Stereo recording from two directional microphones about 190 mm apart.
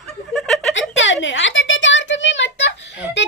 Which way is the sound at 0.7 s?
75° left (ahead or behind).